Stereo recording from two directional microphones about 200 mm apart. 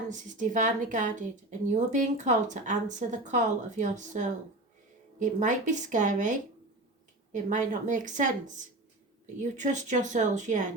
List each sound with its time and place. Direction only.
0.1 s speech: 40° right (ahead or behind)